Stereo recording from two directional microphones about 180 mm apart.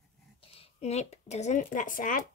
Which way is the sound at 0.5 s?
35° left (ahead or behind).